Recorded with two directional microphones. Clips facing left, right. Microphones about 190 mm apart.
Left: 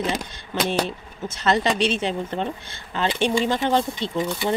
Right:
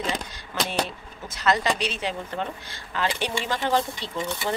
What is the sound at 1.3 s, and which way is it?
Speech, 25° left (ahead or behind).